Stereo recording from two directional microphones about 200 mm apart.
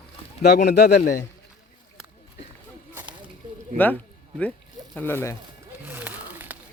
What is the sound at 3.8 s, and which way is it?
Speech, 10° left (ahead or behind).